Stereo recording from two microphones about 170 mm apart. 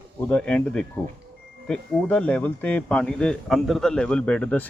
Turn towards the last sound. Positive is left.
turn(degrees=5)  # may be behind; listen again after turning